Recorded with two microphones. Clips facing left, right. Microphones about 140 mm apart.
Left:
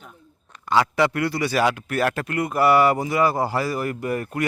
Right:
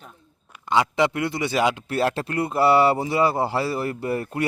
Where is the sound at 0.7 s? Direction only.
20° right (ahead or behind).